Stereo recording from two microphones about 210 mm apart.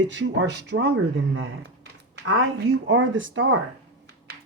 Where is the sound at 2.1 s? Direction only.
70° right (ahead or behind).